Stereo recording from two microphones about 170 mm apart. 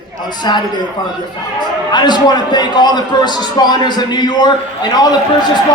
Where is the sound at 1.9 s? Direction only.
25° left (ahead or behind).